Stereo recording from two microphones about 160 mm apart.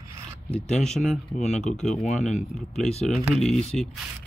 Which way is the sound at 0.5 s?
5° left (ahead or behind).